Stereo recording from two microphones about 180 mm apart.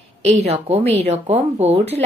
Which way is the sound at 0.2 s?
35° right (ahead or behind).